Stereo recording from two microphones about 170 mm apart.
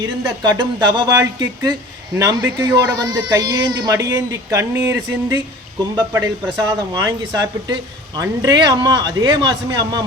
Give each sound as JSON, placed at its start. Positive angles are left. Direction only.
{"t": 0.0, "sound": "a man's voice", "side_deg": -25}
{"t": 6.7, "sound": "a man's voice", "side_deg": -20}